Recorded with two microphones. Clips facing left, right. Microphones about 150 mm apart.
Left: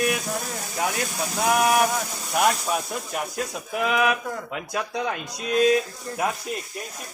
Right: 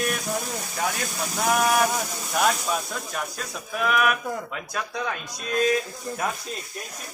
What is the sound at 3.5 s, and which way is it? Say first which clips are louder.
Speech: right 1 dB; 20° left (ahead or behind).